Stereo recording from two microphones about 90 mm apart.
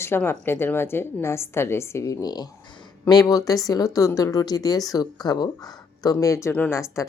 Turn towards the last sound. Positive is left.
turn(degrees=35)  # may be behind; listen again after turning